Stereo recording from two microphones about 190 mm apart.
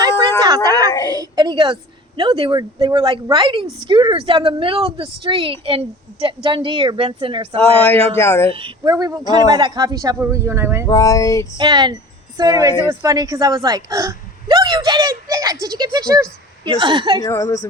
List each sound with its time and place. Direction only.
0.0 s a sound: 20° right (ahead or behind)
1.1 s a woman's voice: 20° right (ahead or behind)
8.2 s speech: 15° left (ahead or behind)
8.4 s a woman's voice: 30° right (ahead or behind)
10.8 s speech: 15° left (ahead or behind)
11.5 s a woman's voice: 25° right (ahead or behind)
17.2 s speech: 15° left (ahead or behind)